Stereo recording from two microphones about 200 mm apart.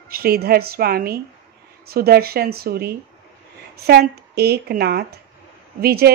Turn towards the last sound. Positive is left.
turn(degrees=-50)  # may be behind; listen again after turning